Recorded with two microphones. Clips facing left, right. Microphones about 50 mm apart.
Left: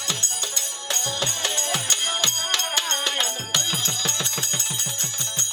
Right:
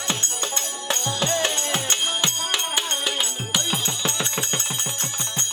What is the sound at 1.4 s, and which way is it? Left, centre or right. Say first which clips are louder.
Music: right 3 dB; right.